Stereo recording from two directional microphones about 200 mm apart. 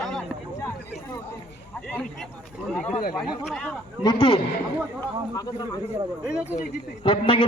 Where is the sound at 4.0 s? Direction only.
25° left (ahead or behind).